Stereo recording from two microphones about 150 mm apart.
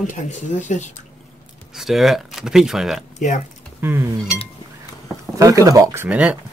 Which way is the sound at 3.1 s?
55° left (ahead or behind).